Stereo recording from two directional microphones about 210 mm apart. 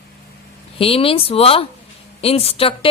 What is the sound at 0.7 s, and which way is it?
A woman's voice, 25° left (ahead or behind).